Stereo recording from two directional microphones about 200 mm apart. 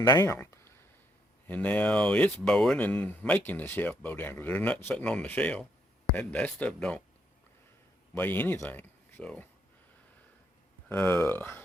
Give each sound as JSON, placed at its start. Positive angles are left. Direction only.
{"t": 0.0, "sound": "speech", "side_deg": 20}
{"t": 0.3, "sound": "a sound", "side_deg": 10}
{"t": 1.5, "sound": "speech", "side_deg": 10}
{"t": 8.1, "sound": "speech", "side_deg": 10}
{"t": 10.8, "sound": "speech", "side_deg": 10}